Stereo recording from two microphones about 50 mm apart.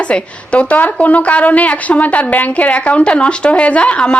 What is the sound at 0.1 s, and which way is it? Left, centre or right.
A woman's voice, left.